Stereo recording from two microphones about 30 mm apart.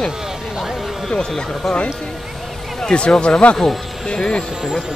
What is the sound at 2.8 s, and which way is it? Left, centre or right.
Speech, left.